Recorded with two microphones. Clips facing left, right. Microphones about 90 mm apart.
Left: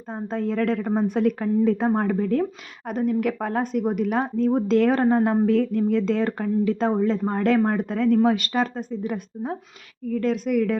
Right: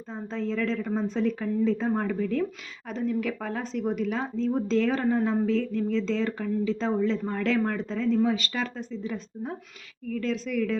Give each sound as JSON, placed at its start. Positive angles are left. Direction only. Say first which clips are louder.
{"t": 0.3, "sound": "a woman's voice", "louder": "left 5 dB", "side_deg": 50}
{"t": 7.8, "sound": "a woman's voice", "louder": "left 5 dB", "side_deg": 60}
{"t": 8.4, "sound": "speech", "louder": "left 7 dB", "side_deg": 45}
{"t": 10.2, "sound": "speech", "louder": "left 6 dB", "side_deg": 55}